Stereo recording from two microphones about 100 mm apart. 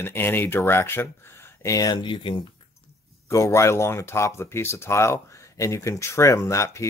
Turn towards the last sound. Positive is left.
turn(degrees=30)  # may be behind; listen again after turning